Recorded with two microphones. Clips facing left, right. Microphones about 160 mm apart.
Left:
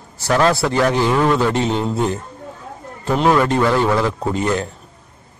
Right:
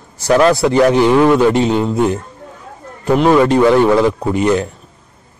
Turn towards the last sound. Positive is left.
turn(degrees=-20)  # may be behind; listen again after turning